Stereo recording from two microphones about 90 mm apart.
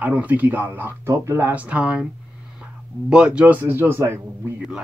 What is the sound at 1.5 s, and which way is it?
A man's voice, 15° right (ahead or behind).